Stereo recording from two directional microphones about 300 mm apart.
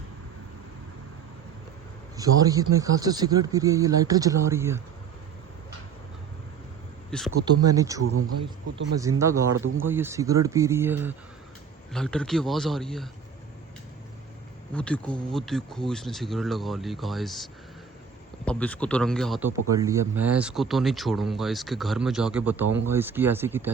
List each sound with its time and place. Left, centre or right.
2.1 s speech: centre
7.3 s speech: centre
9.6 s speech: right
9.8 s a man's voice: centre
14.7 s a man's voice: centre